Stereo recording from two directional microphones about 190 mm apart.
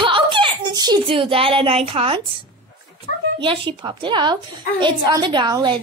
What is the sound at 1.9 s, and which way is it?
Speech, 30° right (ahead or behind).